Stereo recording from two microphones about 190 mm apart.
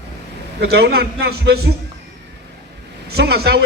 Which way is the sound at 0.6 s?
55° right (ahead or behind).